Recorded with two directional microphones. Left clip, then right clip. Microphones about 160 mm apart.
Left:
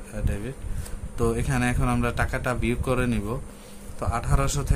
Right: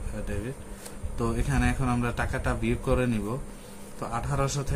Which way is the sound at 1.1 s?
45° left (ahead or behind).